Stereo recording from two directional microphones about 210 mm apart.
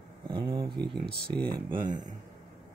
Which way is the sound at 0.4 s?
25° right (ahead or behind).